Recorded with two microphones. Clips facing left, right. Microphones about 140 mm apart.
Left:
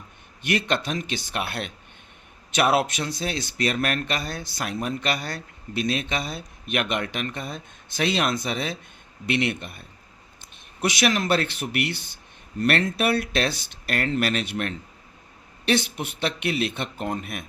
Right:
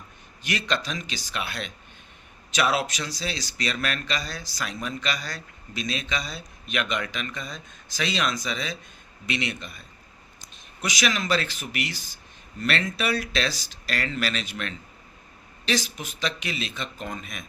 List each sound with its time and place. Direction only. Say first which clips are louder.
0.4 s speech: left 4 dB; 55° left (ahead or behind)